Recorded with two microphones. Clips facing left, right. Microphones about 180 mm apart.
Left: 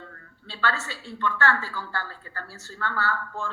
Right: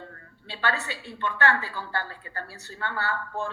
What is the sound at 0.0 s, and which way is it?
A woman's voice, 20° right (ahead or behind).